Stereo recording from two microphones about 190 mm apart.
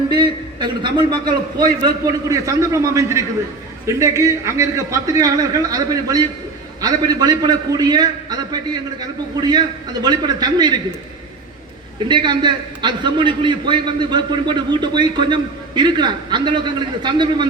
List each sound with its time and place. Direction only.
0.1 s a man's voice: 25° right (ahead or behind)
12.0 s a man's voice: 25° right (ahead or behind)